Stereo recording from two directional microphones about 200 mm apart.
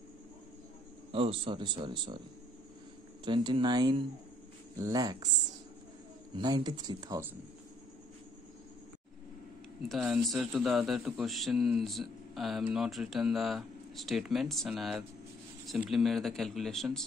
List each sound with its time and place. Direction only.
1.1 s speech: 25° right (ahead or behind)
3.3 s speech: 25° right (ahead or behind)
6.3 s speech: 20° right (ahead or behind)
9.8 s a man's voice: centre (ahead or behind)